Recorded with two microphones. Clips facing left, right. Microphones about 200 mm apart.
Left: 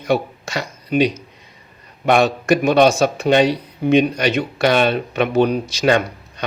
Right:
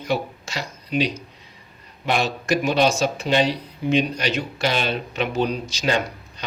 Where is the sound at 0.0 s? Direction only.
55° left (ahead or behind).